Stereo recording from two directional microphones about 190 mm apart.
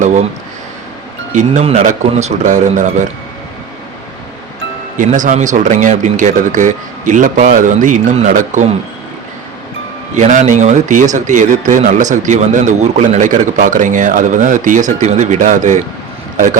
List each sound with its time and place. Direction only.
0.0 s speech: 40° right (ahead or behind)
1.3 s a man's voice: 40° right (ahead or behind)
4.9 s a man's voice: 40° right (ahead or behind)
10.2 s a man's voice: 40° right (ahead or behind)